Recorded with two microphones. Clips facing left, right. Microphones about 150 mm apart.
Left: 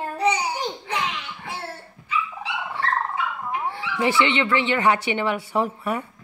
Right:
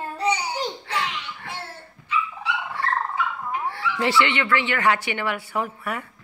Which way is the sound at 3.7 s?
15° left (ahead or behind).